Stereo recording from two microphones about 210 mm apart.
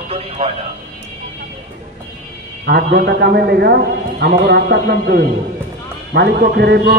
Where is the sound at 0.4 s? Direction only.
30° right (ahead or behind).